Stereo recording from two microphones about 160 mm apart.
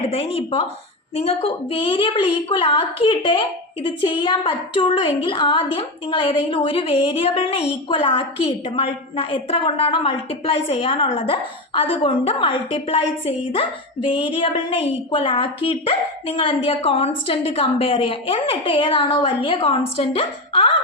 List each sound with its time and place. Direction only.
0.1 s a woman's voice: 40° left (ahead or behind)